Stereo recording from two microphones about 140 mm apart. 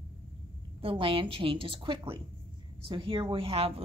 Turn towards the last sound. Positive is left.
turn(degrees=-45)  # may be behind; listen again after turning